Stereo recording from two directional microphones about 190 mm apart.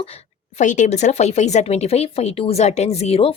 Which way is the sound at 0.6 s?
40° left (ahead or behind).